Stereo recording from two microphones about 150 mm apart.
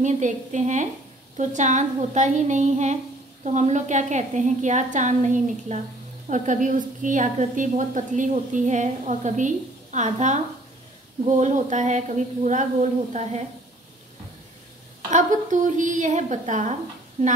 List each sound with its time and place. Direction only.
0.0 s a woman's voice: 55° right (ahead or behind)
15.0 s a woman's voice: 55° right (ahead or behind)